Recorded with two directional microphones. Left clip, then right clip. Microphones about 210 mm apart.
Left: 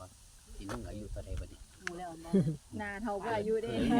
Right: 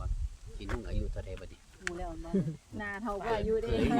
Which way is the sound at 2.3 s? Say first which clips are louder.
Left 3 dB; 30° left (ahead or behind).